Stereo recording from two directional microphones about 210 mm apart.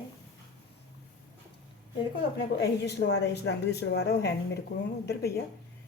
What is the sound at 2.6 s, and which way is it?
Speech, 55° left (ahead or behind).